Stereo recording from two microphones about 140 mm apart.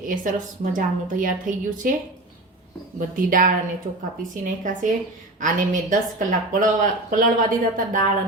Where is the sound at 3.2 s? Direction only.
75° right (ahead or behind).